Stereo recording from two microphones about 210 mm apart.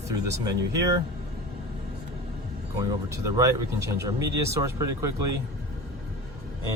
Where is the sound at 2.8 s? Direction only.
15° right (ahead or behind).